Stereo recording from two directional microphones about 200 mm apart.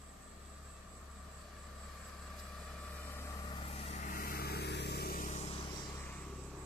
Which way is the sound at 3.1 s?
15° left (ahead or behind).